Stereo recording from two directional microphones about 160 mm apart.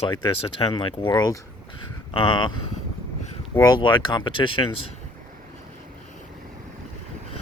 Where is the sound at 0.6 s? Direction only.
35° left (ahead or behind).